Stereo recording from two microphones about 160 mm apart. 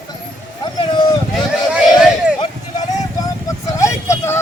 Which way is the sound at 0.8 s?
30° left (ahead or behind).